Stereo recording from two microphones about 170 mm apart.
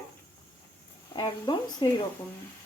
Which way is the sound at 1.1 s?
25° left (ahead or behind).